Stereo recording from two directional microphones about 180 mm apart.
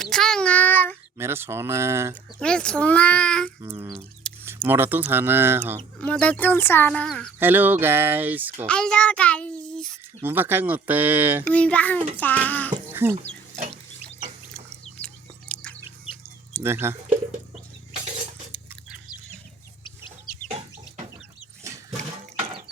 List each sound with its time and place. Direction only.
0.0 s child singing: 5° left (ahead or behind)
1.2 s speech: 15° right (ahead or behind)
2.4 s a child's voice: 5° left (ahead or behind)
3.6 s speech: 15° right (ahead or behind)
6.0 s speech: 5° left (ahead or behind)
7.3 s speech: 10° right (ahead or behind)
8.6 s a child's voice: 5° left (ahead or behind)
10.2 s speech: 10° right (ahead or behind)
11.4 s speech: 5° left (ahead or behind)
12.9 s a sound: 15° right (ahead or behind)
15.0 s chewing: 5° left (ahead or behind)
16.1 s a sound: 30° left (ahead or behind)
16.6 s speech: 15° right (ahead or behind)